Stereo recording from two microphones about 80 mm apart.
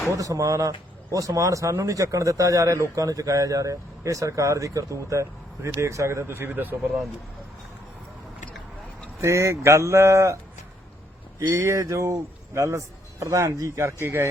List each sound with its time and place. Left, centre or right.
0.2 s speech: right
9.2 s a man's voice: right
11.3 s a man's voice: right